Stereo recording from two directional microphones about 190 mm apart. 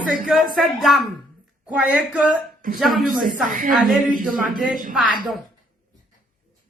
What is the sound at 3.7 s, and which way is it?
Speech, centre (ahead or behind).